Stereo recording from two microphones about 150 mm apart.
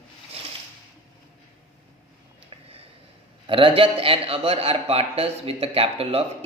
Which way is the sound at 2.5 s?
40° right (ahead or behind).